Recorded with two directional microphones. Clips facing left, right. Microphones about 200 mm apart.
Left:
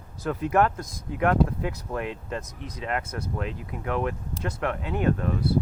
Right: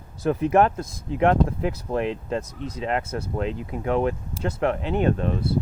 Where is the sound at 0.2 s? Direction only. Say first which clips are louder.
Right 4 dB; 25° right (ahead or behind).